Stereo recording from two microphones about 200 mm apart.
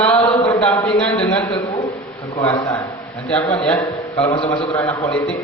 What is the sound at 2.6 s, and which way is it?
Speech, 15° left (ahead or behind).